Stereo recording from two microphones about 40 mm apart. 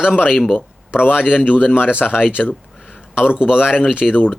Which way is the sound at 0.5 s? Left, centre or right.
Left.